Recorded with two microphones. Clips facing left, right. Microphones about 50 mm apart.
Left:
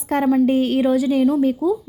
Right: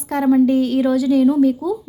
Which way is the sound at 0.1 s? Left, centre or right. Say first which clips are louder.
Left 1 dB; left.